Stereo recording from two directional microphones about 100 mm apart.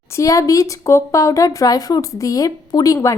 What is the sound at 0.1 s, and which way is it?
Speech, 35° left (ahead or behind).